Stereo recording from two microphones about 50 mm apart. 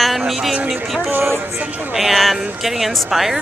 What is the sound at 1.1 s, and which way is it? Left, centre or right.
Speech, right.